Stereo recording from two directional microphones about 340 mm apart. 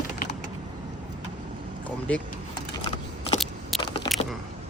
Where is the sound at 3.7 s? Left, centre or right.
Centre.